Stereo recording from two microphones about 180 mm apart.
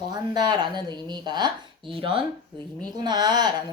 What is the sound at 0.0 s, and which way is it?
Speech, 25° right (ahead or behind).